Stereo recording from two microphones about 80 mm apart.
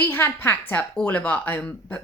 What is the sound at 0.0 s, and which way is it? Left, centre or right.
A woman's voice, left.